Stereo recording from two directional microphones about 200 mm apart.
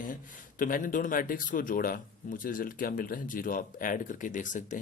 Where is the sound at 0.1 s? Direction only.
45° left (ahead or behind).